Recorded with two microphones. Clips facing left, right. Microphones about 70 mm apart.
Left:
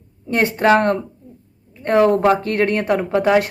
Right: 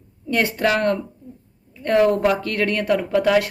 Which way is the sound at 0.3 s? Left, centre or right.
Left.